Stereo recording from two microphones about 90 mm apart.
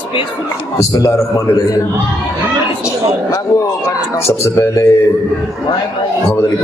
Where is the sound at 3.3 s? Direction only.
35° left (ahead or behind).